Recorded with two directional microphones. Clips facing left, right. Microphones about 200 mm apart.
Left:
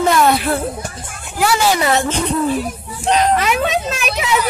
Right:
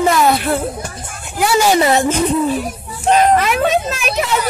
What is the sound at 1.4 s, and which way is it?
A woman's voice, 20° right (ahead or behind).